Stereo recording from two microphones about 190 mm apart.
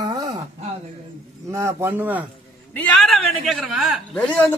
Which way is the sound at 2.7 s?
5° left (ahead or behind).